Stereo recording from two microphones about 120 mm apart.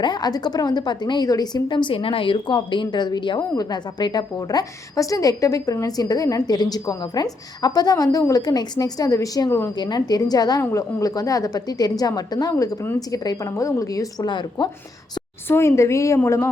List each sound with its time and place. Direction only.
0.0 s a woman's voice: 35° left (ahead or behind)
15.4 s a woman's voice: 20° left (ahead or behind)